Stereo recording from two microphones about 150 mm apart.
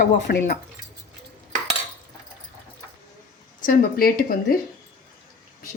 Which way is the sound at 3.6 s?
75° left (ahead or behind).